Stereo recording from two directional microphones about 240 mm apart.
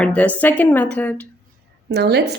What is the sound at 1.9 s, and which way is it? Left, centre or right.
Speech, right.